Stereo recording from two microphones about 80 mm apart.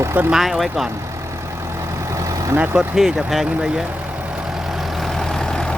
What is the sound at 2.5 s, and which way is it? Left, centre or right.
Speech, centre.